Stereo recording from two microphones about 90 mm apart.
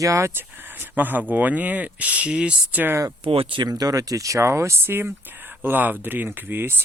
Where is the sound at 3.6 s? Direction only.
45° right (ahead or behind); by 6.7 s 25° right (ahead or behind).